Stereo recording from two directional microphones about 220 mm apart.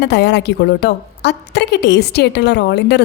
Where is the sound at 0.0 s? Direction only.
50° left (ahead or behind).